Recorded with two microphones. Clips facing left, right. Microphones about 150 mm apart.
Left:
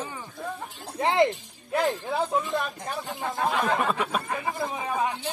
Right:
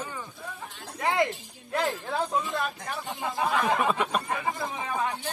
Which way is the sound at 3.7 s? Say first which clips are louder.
Even; centre (ahead or behind).